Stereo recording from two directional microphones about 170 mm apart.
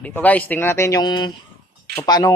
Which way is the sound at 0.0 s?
10° left (ahead or behind).